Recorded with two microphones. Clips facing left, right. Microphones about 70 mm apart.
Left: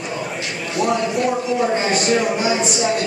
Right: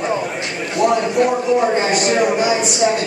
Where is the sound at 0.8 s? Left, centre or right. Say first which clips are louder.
Right 4 dB; centre.